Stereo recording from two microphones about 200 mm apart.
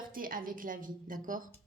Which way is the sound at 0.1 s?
45° right (ahead or behind).